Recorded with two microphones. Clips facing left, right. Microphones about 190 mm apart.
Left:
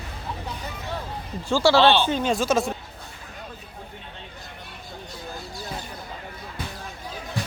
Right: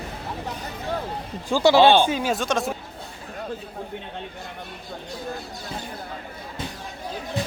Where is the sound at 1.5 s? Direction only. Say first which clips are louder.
Right 2 dB; 15° right (ahead or behind); by 2.7 s centre (ahead or behind).